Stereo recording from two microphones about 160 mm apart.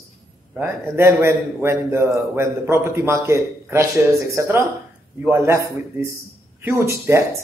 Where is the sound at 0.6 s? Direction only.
15° right (ahead or behind).